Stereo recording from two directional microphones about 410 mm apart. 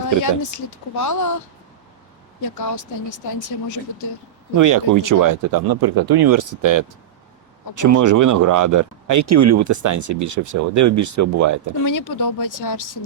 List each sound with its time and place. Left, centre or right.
0.2 s speech: left
2.4 s speech: left
4.5 s speech: right
11.9 s speech: left